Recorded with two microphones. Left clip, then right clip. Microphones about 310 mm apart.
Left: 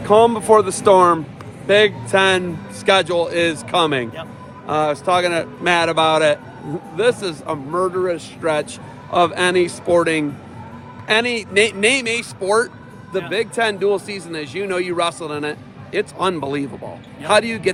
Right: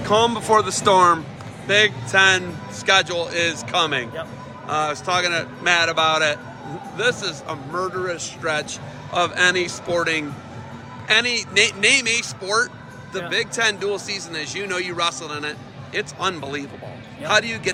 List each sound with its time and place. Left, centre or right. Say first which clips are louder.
0.0 s speech: left 5 dB; centre